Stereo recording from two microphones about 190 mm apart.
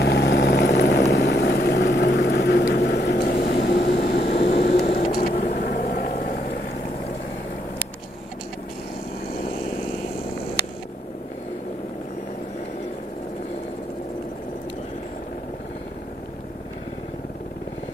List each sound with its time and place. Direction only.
0.0 s vehicle: 60° left (ahead or behind)